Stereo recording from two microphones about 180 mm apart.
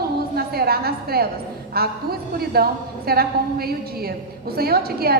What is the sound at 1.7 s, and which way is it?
A woman's voice, 60° right (ahead or behind).